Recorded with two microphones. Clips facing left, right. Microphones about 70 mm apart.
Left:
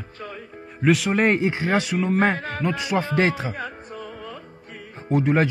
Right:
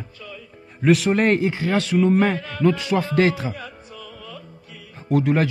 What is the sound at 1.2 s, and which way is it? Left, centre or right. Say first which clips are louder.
Speech: right 1 dB; left.